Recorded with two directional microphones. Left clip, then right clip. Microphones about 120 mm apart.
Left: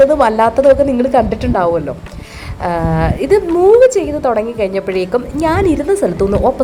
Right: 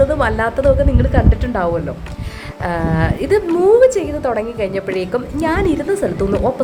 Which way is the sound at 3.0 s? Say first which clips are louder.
Left 4 dB; 25° left (ahead or behind).